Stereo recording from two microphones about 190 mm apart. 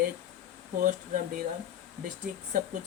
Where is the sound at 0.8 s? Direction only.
45° right (ahead or behind).